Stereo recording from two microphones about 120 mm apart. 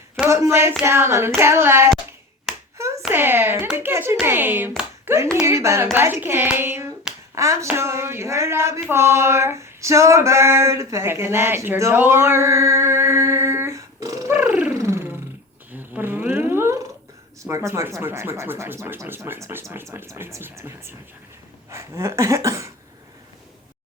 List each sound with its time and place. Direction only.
0.3 s speech: 25° right (ahead or behind)
2.7 s hands: 25° right (ahead or behind)
3.1 s speech: 20° right (ahead or behind)
7.3 s a sound: 25° right (ahead or behind)
15.7 s cat: 15° right (ahead or behind)
17.4 s speech: 25° right (ahead or behind)